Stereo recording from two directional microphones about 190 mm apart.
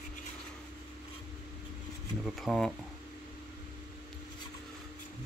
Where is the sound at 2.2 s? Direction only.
Centre (ahead or behind).